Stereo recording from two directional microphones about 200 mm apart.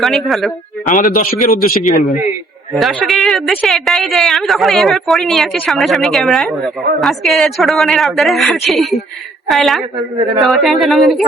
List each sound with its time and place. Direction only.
0.0 s a man's voice: centre (ahead or behind)
0.9 s a man's voice: 45° left (ahead or behind)
2.7 s speech: centre (ahead or behind)